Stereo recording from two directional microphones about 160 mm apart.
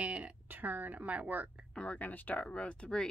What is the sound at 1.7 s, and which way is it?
Speech, 10° left (ahead or behind).